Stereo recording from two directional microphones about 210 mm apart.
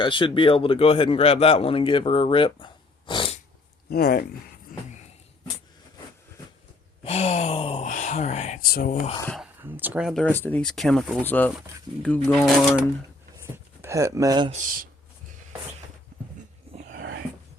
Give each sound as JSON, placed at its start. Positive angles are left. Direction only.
{"t": 0.0, "sound": "a man's voice", "side_deg": 25}
{"t": 3.1, "sound": "cat", "side_deg": 25}
{"t": 3.8, "sound": "speech", "side_deg": 45}
{"t": 4.7, "sound": "a sound", "side_deg": 40}
{"t": 7.0, "sound": "sigh", "side_deg": 30}
{"t": 8.7, "sound": "speech", "side_deg": 40}
{"t": 9.2, "sound": "speech", "side_deg": 5}
{"t": 9.6, "sound": "speech", "side_deg": -10}
{"t": 10.2, "sound": "speech", "side_deg": 10}
{"t": 13.8, "sound": "speech", "side_deg": -15}
{"t": 14.5, "sound": "speech", "side_deg": -40}